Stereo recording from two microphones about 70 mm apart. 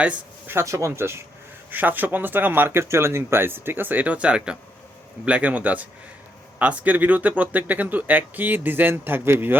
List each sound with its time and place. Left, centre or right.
0.6 s speech: right
1.7 s speech: right